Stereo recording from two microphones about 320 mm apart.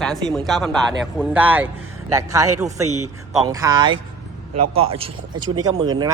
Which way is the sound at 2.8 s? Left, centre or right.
Right.